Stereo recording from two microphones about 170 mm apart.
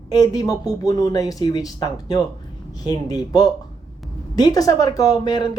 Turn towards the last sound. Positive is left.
turn(degrees=25)  # may be behind; listen again after turning